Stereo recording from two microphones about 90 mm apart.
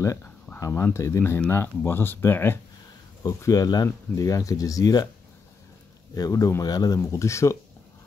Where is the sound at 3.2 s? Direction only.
40° left (ahead or behind).